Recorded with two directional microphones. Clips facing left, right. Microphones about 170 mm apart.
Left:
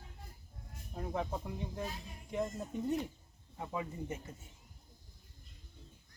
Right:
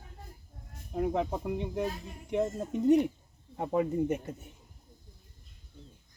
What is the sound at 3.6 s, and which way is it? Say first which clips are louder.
Speech: right 12 dB; 55° right (ahead or behind).